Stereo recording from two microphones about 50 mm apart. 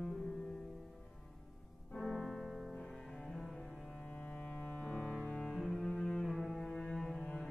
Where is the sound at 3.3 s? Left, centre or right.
Centre.